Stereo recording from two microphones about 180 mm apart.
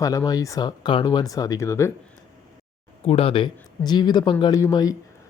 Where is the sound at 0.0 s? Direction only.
20° left (ahead or behind).